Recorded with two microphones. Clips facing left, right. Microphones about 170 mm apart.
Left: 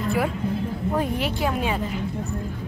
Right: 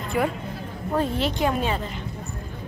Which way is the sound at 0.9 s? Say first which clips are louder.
Right 3 dB; 10° left (ahead or behind).